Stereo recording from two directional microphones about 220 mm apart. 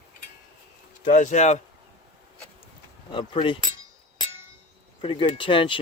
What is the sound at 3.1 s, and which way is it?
Speech, 25° left (ahead or behind).